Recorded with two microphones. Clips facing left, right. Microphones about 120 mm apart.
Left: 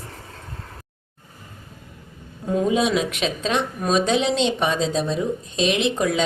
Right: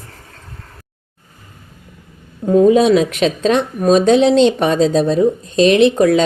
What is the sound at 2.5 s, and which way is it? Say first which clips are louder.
Speech: right 10 dB; 40° right (ahead or behind).